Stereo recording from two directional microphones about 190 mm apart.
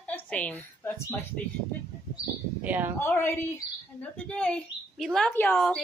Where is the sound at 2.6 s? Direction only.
10° right (ahead or behind).